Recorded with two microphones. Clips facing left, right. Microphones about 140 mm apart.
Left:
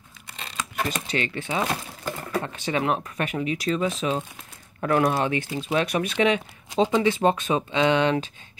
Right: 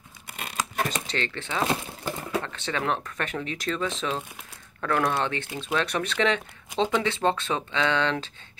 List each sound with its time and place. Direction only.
0.3 s tearing: 55° right (ahead or behind)
1.0 s speech: 10° left (ahead or behind)